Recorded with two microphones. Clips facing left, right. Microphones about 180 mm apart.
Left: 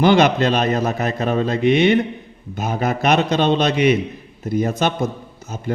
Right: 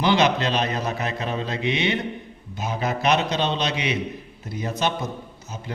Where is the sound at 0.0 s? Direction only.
50° left (ahead or behind).